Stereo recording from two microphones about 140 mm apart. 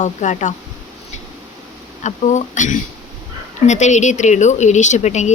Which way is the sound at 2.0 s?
60° left (ahead or behind).